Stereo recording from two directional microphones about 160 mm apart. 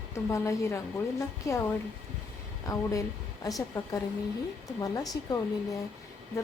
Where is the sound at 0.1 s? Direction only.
20° left (ahead or behind).